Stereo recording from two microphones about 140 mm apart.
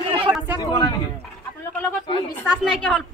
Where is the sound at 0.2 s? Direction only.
10° right (ahead or behind).